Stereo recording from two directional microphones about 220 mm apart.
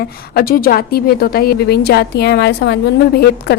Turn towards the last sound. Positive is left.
turn(degrees=45)  # may be behind; listen again after turning